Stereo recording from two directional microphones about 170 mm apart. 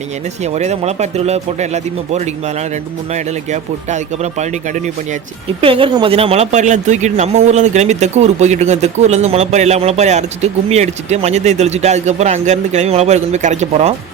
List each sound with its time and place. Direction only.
0.4 s speech: 40° right (ahead or behind)
3.5 s speech: 45° right (ahead or behind)
5.5 s speech: 30° right (ahead or behind)